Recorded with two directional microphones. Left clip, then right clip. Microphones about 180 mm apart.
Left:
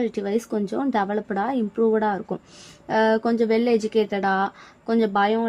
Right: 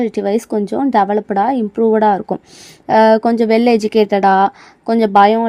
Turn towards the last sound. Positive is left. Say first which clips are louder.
# right 10 dB
turn(degrees=-50)  # may be behind; listen again after turning